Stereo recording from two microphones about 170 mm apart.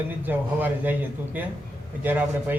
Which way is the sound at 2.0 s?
10° right (ahead or behind).